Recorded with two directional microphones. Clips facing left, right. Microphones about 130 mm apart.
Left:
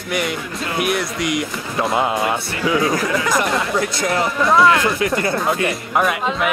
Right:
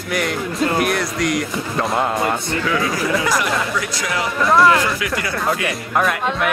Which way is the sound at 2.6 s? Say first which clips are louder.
Left 5 dB; 20° left (ahead or behind).